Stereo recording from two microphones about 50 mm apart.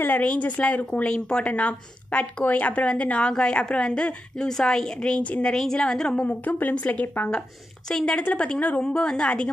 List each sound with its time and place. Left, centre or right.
0.2 s speech: left
1.0 s a woman's voice: centre
5.5 s a woman's voice: centre
6.2 s speech: left
6.7 s a woman's voice: left
7.9 s a woman's voice: centre
8.8 s a woman's voice: centre